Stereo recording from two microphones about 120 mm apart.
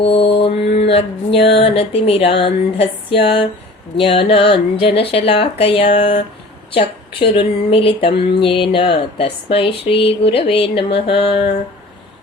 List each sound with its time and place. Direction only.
0.0 s speech: 55° left (ahead or behind)